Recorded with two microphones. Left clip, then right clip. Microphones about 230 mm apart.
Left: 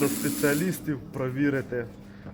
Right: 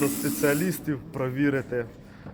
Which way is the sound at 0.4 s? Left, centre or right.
Centre.